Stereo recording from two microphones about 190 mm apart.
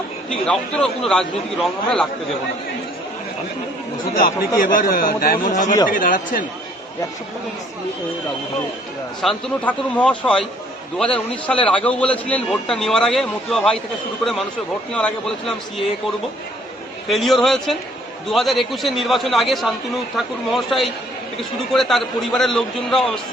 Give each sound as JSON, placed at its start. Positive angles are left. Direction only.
{"t": 0.3, "sound": "a man's voice", "side_deg": 5}
{"t": 4.1, "sound": "a man's voice", "side_deg": 45}
{"t": 9.2, "sound": "a man's voice", "side_deg": 5}
{"t": 14.9, "sound": "a man's voice", "side_deg": 5}
{"t": 17.1, "sound": "a man's voice", "side_deg": 0}